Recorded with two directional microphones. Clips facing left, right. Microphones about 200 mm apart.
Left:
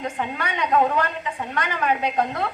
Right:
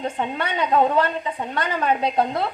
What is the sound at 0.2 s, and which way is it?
A woman's voice, 25° right (ahead or behind).